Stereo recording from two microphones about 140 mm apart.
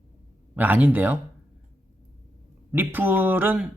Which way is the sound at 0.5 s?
10° right (ahead or behind).